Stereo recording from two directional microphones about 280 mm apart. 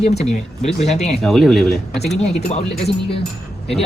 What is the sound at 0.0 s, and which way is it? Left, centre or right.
Speech, left.